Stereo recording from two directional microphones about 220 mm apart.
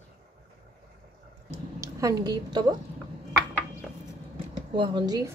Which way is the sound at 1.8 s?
15° right (ahead or behind).